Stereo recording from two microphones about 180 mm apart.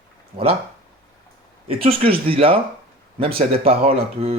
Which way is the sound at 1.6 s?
30° right (ahead or behind).